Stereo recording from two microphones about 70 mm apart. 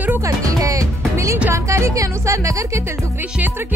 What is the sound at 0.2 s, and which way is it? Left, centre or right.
Music, right.